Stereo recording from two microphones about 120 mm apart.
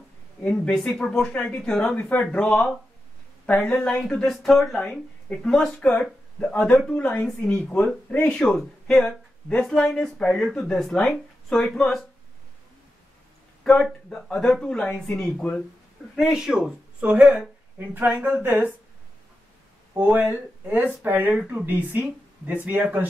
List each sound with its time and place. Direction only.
0.4 s speech: 10° left (ahead or behind)
13.8 s speech: 5° left (ahead or behind)
14.9 s speech: 15° left (ahead or behind)
15.1 s speech: 5° left (ahead or behind); by 18.7 s 15° right (ahead or behind)
19.9 s speech: 15° right (ahead or behind)